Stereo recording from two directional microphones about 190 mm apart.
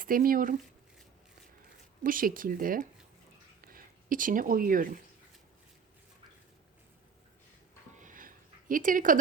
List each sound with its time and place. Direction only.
0.0 s speech: 50° right (ahead or behind)
2.0 s speech: 45° right (ahead or behind)
7.9 s a sound: 45° right (ahead or behind)